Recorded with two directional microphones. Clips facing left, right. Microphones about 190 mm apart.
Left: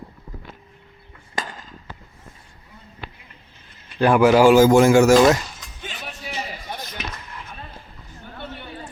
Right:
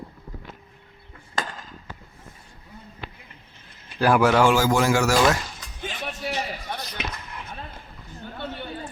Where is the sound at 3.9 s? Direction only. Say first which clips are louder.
Left 4 dB; centre (ahead or behind).